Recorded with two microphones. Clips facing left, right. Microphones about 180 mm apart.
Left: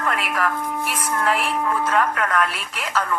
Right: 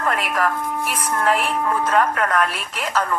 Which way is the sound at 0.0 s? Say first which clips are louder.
Right 2 dB; 40° right (ahead or behind).